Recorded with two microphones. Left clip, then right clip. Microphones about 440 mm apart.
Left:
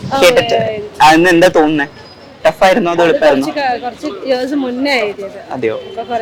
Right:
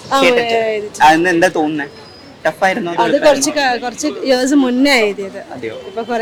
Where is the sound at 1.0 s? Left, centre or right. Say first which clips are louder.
Left 3 dB; left.